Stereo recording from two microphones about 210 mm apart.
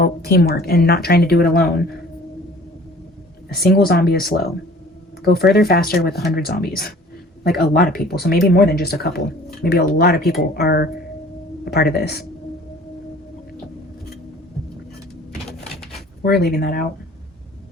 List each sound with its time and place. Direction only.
0.0 s speech: 45° left (ahead or behind)
3.5 s speech: 45° left (ahead or behind)
16.2 s speech: 45° left (ahead or behind)